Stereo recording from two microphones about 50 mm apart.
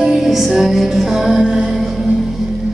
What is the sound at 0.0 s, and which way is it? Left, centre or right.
Music, centre.